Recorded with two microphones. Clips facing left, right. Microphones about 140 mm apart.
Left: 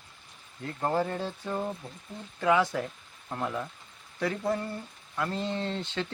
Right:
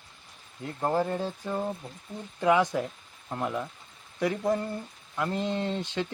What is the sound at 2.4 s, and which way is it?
Speech, 20° right (ahead or behind).